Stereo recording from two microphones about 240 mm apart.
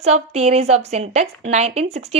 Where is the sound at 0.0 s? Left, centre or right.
Right.